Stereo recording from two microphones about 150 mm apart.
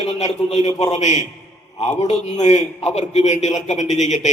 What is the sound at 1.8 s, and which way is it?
A man's voice, 45° left (ahead or behind).